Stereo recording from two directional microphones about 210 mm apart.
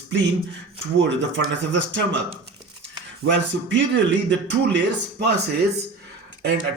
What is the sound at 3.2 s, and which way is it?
Speech, 60° right (ahead or behind).